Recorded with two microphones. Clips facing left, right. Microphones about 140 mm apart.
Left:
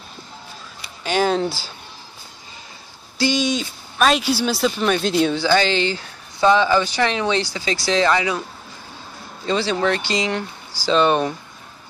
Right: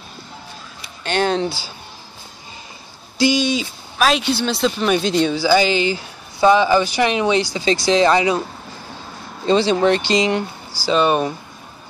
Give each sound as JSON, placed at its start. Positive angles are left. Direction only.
{"t": 1.0, "sound": "a man's voice", "side_deg": 5}
{"t": 3.3, "sound": "a man's voice", "side_deg": 0}
{"t": 9.5, "sound": "speech", "side_deg": -20}
{"t": 10.7, "sound": "speech", "side_deg": -10}